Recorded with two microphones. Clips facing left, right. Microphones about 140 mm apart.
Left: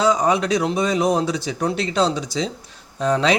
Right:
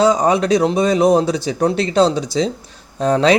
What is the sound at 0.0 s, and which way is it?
Speech, 35° right (ahead or behind).